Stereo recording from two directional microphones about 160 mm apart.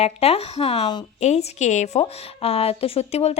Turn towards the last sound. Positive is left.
turn(degrees=40)  # may be behind; listen again after turning